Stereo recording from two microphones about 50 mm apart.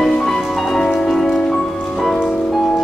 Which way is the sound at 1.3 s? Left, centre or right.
Left.